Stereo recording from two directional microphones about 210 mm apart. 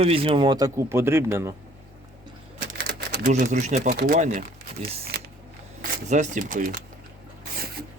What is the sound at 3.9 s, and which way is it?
Speech, 50° right (ahead or behind).